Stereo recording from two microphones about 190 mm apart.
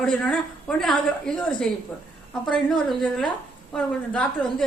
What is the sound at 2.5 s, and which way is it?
A woman's voice, centre (ahead or behind).